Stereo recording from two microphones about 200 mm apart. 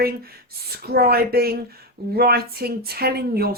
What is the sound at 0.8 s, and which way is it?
Speech, 50° right (ahead or behind).